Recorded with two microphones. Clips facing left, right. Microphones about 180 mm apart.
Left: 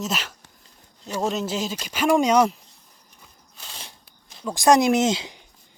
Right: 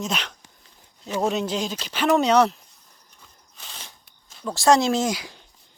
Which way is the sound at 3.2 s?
10° left (ahead or behind).